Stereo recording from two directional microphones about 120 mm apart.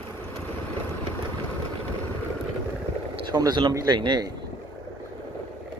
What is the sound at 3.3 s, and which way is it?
Speech, 35° right (ahead or behind).